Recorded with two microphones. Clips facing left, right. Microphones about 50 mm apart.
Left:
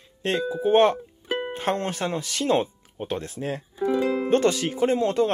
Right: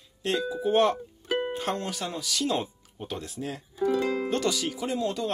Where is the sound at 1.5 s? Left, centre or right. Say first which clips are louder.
Left 4 dB; left.